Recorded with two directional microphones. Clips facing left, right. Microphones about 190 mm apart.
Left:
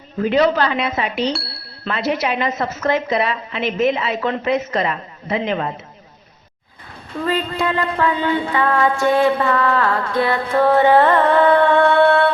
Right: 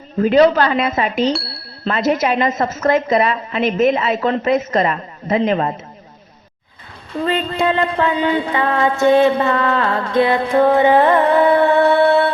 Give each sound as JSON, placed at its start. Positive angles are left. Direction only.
{"t": 0.2, "sound": "a woman's voice", "side_deg": -40}
{"t": 1.3, "sound": "bicycle bell", "side_deg": 0}
{"t": 1.9, "sound": "a woman's voice", "side_deg": -45}
{"t": 7.3, "sound": "a sound", "side_deg": -25}